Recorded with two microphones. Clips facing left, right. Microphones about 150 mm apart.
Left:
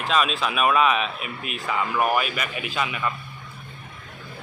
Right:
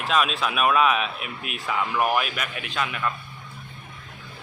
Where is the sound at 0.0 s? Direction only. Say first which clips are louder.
Even; centre (ahead or behind).